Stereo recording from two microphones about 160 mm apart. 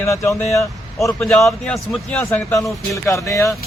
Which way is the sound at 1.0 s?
5° left (ahead or behind).